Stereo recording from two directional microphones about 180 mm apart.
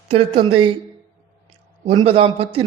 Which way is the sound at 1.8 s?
35° right (ahead or behind).